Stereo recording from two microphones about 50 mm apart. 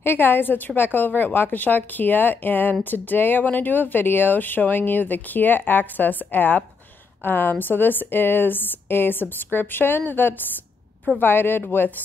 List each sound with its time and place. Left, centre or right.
0.0 s a woman's voice: left